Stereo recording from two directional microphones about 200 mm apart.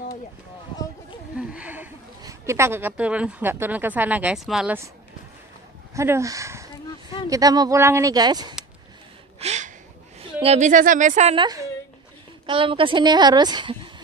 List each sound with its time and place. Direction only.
1.4 s speech: 5° right (ahead or behind)
5.9 s a woman's voice: 15° right (ahead or behind)
9.4 s a sound: 35° right (ahead or behind)
10.4 s speech: 35° right (ahead or behind)
11.4 s a woman's voice: 15° right (ahead or behind)